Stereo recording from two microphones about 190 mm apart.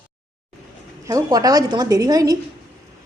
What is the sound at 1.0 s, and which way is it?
A woman's voice, 15° right (ahead or behind).